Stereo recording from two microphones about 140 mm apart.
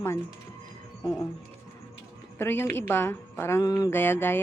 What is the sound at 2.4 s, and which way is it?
Speech, 15° left (ahead or behind).